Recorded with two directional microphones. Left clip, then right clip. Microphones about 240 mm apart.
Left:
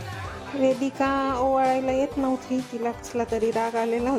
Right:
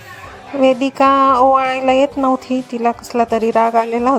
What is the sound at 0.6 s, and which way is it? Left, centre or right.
Speech, right.